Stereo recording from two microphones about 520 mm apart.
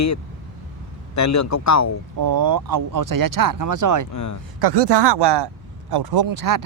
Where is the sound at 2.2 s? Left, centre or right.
Right.